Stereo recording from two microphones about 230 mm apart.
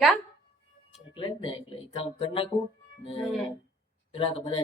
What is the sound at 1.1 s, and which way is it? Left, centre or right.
Speech, left.